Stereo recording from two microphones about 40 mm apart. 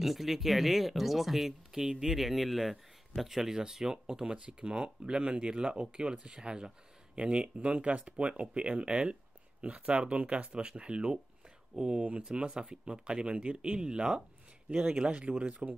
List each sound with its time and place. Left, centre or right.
0.0 s speech: centre; by 12.4 s right
12.4 s speech: centre
15.1 s speech: right